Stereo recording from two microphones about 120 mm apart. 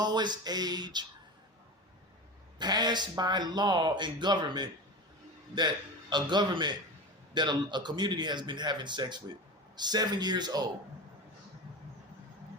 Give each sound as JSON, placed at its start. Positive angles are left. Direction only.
{"t": 0.0, "sound": "speech", "side_deg": -35}
{"t": 2.6, "sound": "speech", "side_deg": -35}